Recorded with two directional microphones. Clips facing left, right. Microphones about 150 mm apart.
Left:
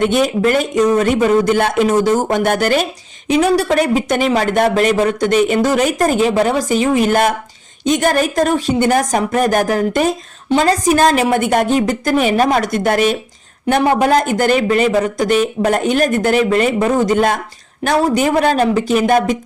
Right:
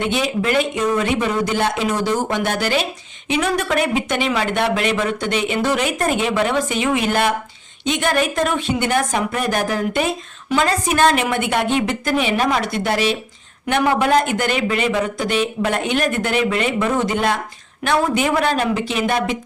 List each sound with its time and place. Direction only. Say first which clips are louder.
0.0 s a man's voice: left 6 dB; 45° left (ahead or behind)
3.2 s speech: left 6 dB; 35° left (ahead or behind)
13.7 s speech: left 4 dB; 35° left (ahead or behind)